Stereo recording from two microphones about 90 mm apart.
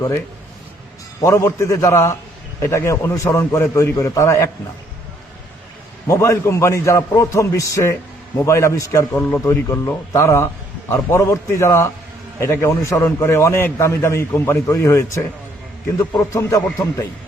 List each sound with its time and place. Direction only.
1.2 s a man's voice: 35° left (ahead or behind)
6.1 s a man's voice: 35° left (ahead or behind)